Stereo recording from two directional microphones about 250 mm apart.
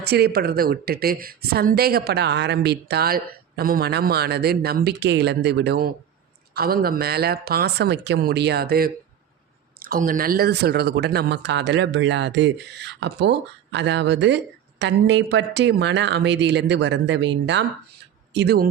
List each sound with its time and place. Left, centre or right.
0.0 s speech: right